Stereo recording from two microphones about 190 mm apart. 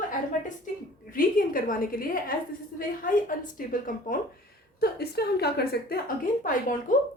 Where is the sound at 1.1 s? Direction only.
50° left (ahead or behind).